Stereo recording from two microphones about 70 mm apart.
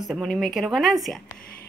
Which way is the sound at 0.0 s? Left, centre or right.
Centre.